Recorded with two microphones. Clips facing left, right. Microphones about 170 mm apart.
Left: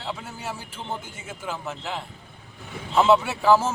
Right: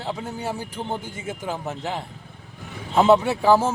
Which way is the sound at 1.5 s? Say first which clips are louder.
Right 2 dB; 40° right (ahead or behind).